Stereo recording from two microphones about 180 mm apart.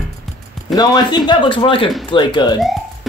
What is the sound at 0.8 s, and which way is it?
Speech, 25° left (ahead or behind).